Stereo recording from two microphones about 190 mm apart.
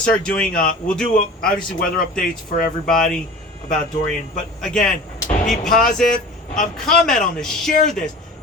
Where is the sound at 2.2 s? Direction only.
50° left (ahead or behind).